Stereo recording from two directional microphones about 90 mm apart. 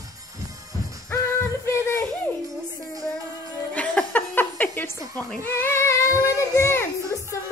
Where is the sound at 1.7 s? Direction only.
30° left (ahead or behind).